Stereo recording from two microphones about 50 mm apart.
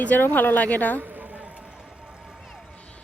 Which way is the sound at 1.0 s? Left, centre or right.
Right.